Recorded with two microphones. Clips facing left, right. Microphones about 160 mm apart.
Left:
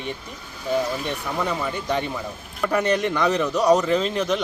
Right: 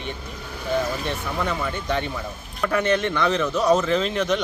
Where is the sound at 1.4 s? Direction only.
10° left (ahead or behind).